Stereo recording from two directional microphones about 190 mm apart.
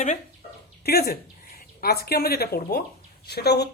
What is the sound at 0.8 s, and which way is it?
Speech, 55° left (ahead or behind).